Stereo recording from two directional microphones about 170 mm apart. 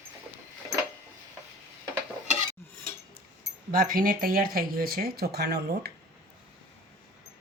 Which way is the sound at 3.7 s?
55° right (ahead or behind).